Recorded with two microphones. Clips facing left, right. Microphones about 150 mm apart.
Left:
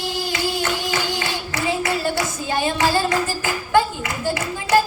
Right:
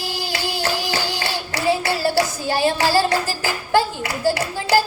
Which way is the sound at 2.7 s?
30° right (ahead or behind).